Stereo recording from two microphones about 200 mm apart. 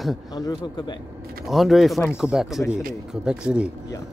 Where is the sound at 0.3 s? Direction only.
20° left (ahead or behind).